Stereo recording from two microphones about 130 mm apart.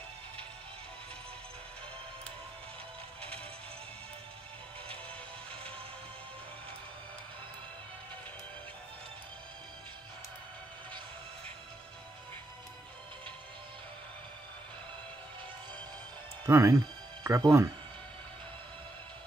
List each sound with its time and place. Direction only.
5.5 s music: 10° left (ahead or behind)
16.4 s speech: 20° right (ahead or behind)
16.7 s music: 30° right (ahead or behind)